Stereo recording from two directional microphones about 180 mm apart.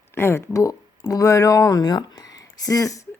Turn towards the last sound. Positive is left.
turn(degrees=20)  # may be behind; listen again after turning